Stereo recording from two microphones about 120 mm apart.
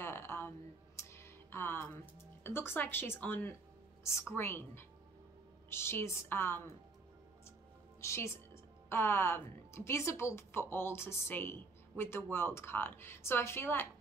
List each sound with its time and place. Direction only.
0.0 s music: 20° left (ahead or behind)
2.4 s a woman's voice: 20° left (ahead or behind)
8.0 s a woman's voice: 25° left (ahead or behind)